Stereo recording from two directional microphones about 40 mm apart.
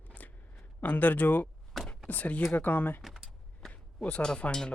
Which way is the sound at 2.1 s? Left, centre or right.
Left.